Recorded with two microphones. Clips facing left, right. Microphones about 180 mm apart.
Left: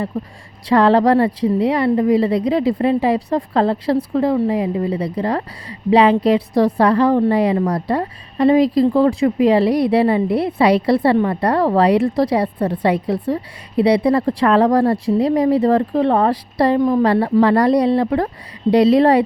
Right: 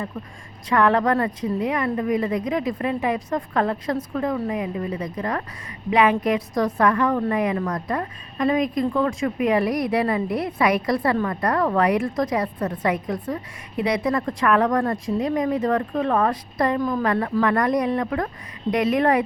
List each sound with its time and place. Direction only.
0.7 s a woman's voice: 30° left (ahead or behind)